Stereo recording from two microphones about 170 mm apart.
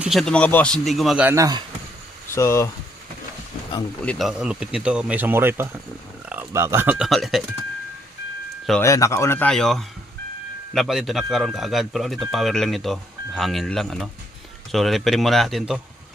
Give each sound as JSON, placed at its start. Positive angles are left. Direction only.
{"t": 0.0, "sound": "speech", "side_deg": 0}
{"t": 2.3, "sound": "speech", "side_deg": 15}
{"t": 4.0, "sound": "speech", "side_deg": 5}
{"t": 7.1, "sound": "speech", "side_deg": 0}
{"t": 8.8, "sound": "speech", "side_deg": 20}